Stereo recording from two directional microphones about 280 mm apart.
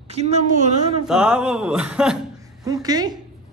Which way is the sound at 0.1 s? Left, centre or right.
Right.